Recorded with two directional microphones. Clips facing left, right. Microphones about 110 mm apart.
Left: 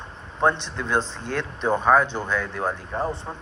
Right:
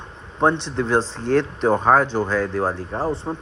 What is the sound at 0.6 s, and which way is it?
A man's voice, 30° right (ahead or behind).